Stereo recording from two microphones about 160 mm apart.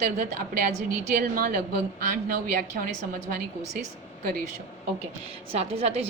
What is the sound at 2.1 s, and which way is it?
Speech, 55° right (ahead or behind).